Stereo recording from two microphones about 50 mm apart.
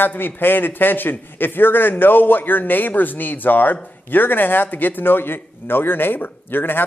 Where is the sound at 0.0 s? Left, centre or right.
Left.